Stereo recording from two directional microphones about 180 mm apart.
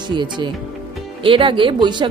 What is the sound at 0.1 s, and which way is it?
A woman's voice, 25° right (ahead or behind).